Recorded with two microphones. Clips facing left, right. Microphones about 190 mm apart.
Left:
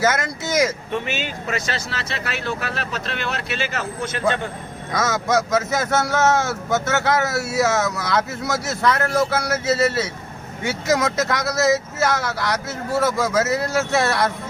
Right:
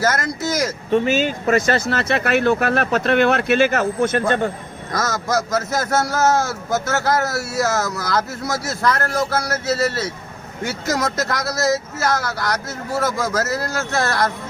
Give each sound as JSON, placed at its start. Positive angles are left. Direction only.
{"t": 0.0, "sound": "speech", "side_deg": 0}
{"t": 0.9, "sound": "speech", "side_deg": -35}
{"t": 4.9, "sound": "speech", "side_deg": 0}